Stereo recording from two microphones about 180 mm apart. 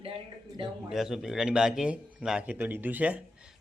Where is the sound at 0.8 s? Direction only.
Centre (ahead or behind).